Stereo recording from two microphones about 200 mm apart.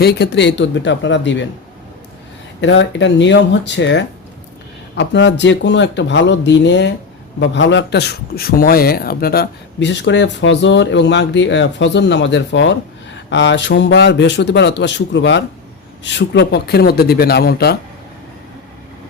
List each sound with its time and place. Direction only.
0.0 s a man's voice: 55° left (ahead or behind)
2.6 s a man's voice: 65° left (ahead or behind)